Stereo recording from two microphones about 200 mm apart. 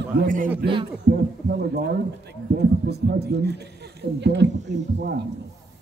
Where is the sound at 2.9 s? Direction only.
55° right (ahead or behind).